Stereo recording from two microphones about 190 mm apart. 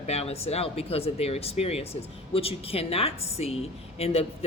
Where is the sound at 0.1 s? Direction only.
35° left (ahead or behind).